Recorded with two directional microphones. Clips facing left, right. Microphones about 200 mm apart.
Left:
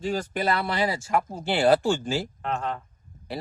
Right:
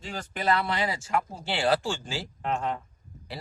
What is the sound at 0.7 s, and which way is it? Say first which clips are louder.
Speech: left 3 dB; 40° left (ahead or behind).